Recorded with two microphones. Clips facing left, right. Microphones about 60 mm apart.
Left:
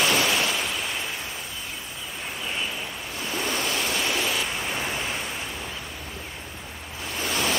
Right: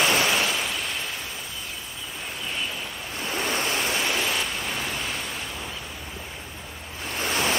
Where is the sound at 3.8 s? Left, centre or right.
Centre.